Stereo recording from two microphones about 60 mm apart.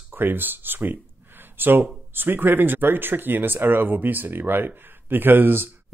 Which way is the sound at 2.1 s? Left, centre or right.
Right.